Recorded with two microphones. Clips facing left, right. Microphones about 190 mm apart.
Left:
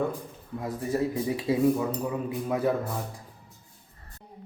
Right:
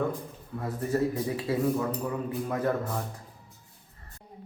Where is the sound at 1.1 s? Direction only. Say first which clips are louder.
Left 2 dB; 15° left (ahead or behind).